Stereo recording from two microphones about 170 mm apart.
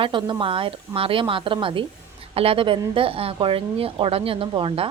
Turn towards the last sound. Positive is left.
turn(degrees=-30)  # may be behind; listen again after turning